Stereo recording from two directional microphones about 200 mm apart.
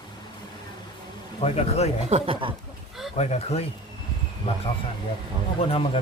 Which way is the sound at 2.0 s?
30° right (ahead or behind).